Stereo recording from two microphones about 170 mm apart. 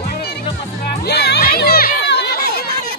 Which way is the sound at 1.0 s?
80° left.